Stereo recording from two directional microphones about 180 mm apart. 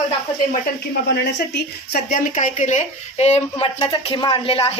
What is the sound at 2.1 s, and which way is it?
A woman's voice, 40° left (ahead or behind).